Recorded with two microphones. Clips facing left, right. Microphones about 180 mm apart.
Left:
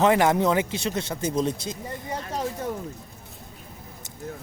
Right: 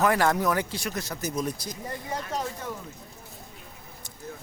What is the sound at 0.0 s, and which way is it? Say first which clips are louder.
Speech: left 4 dB; 20° left (ahead or behind).